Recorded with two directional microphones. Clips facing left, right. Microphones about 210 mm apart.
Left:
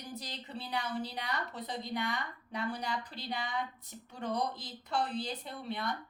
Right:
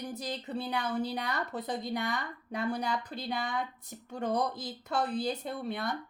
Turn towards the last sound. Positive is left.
turn(degrees=-45)  # may be behind; listen again after turning